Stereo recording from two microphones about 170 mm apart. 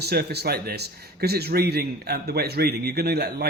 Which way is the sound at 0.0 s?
70° right (ahead or behind).